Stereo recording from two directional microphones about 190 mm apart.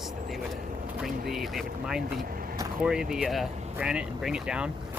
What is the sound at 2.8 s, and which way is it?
Speech, 5° right (ahead or behind).